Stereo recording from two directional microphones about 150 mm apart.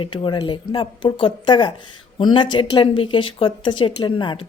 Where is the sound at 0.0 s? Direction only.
35° left (ahead or behind).